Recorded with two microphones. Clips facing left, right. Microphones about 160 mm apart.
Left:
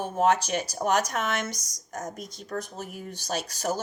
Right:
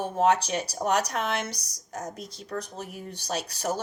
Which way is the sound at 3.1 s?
35° right (ahead or behind).